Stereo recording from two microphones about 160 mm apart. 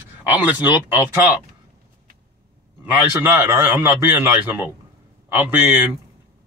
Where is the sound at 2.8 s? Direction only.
10° right (ahead or behind).